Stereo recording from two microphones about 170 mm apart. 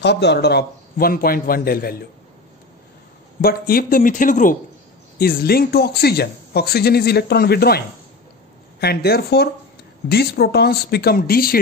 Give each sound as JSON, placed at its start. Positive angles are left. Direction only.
{"t": 0.0, "sound": "a man's voice", "side_deg": 90}
{"t": 3.3, "sound": "speech", "side_deg": 60}
{"t": 5.2, "sound": "speech", "side_deg": 65}